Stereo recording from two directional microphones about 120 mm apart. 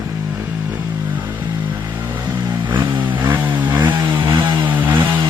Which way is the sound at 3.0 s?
15° right (ahead or behind).